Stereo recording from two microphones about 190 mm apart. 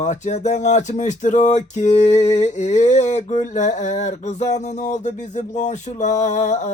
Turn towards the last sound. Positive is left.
turn(degrees=40)  # may be behind; listen again after turning